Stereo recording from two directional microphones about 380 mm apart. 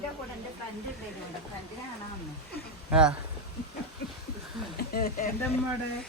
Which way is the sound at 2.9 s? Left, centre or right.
Centre.